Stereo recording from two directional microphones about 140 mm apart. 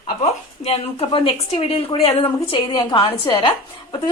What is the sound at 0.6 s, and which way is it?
Speech, 40° left (ahead or behind).